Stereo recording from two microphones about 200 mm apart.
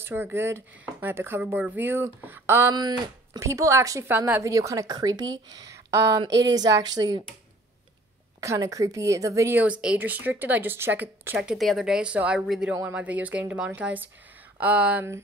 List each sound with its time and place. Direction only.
0.0 s speech: 10° right (ahead or behind)
5.2 s speech: 75° right (ahead or behind)
5.6 s speech: 15° right (ahead or behind)
6.3 s speech: 60° right (ahead or behind)
6.6 s a woman's voice: 20° right (ahead or behind)
8.4 s speech: 15° right (ahead or behind)